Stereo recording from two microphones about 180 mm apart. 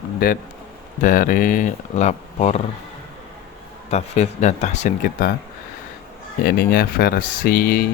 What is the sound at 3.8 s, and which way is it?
Speech, 40° left (ahead or behind).